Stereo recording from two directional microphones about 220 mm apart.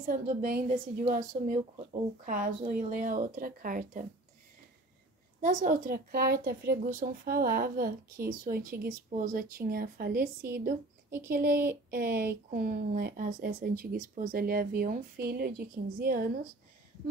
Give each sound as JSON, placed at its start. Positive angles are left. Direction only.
{"t": 0.0, "sound": "a woman's voice", "side_deg": -40}
{"t": 5.4, "sound": "a woman's voice", "side_deg": -35}